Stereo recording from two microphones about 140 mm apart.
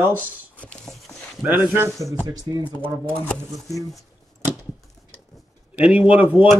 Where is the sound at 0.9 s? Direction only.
5° left (ahead or behind).